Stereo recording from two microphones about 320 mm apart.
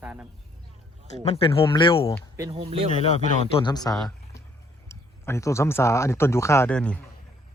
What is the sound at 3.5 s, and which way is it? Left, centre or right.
Speech, centre.